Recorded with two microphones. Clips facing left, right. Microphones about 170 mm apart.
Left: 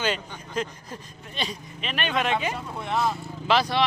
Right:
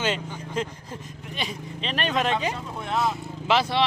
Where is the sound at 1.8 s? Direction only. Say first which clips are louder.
Right 2 dB; 35° right (ahead or behind).